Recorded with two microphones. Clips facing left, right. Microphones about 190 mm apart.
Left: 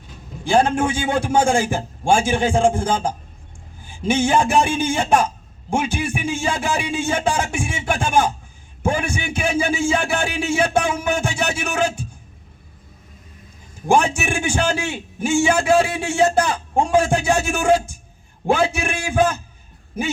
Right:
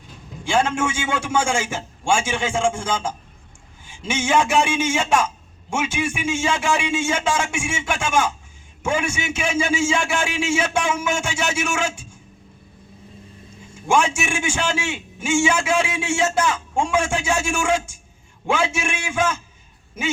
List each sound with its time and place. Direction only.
0.4 s a man's voice: 35° left (ahead or behind)
13.8 s a man's voice: 35° left (ahead or behind)